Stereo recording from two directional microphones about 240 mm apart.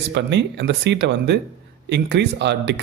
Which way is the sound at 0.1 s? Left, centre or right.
Right.